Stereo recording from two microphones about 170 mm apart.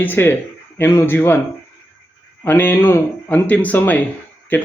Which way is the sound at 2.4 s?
10° left (ahead or behind).